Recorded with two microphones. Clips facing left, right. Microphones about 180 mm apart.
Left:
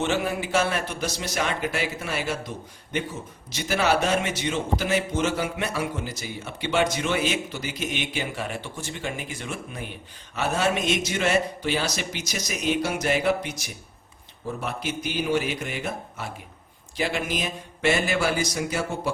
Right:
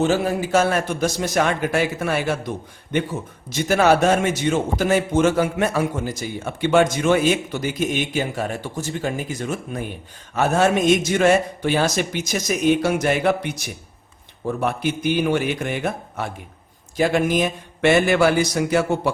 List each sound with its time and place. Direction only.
0.0 s a man's voice: 40° right (ahead or behind); by 2.4 s 55° right (ahead or behind)
3.5 s a man's voice: 50° right (ahead or behind); by 19.1 s 65° right (ahead or behind)